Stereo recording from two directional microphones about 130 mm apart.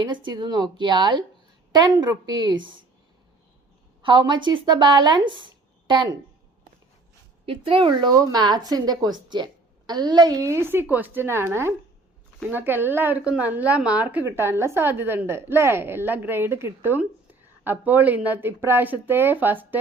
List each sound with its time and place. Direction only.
0.0 s a woman's voice: 35° right (ahead or behind)
4.0 s a woman's voice: 35° right (ahead or behind)
7.4 s a woman's voice: 45° right (ahead or behind); by 19.6 s 15° right (ahead or behind)